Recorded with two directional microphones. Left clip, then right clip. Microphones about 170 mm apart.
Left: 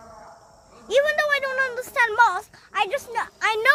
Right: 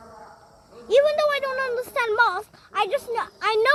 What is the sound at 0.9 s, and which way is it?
A child's voice, 25° left (ahead or behind).